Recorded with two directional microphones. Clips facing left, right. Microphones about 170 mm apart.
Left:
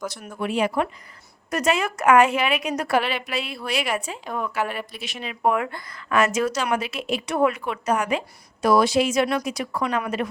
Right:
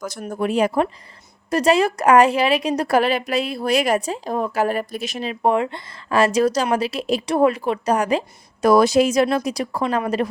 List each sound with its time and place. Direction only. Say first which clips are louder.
0.0 s a woman's voice: right 5 dB; 45° right (ahead or behind)